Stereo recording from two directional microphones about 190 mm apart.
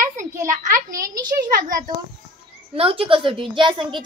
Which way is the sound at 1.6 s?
45° right (ahead or behind).